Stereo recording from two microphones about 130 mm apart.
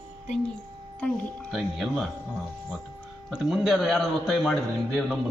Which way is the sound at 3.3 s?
Centre (ahead or behind).